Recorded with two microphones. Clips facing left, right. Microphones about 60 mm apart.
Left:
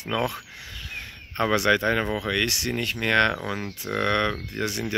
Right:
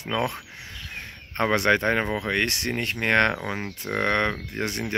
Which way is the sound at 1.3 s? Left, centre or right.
Right.